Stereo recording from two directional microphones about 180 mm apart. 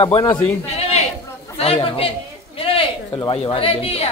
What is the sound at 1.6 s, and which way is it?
Speech, 30° left (ahead or behind).